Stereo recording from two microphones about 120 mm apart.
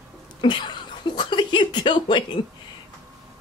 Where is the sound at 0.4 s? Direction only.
40° left (ahead or behind).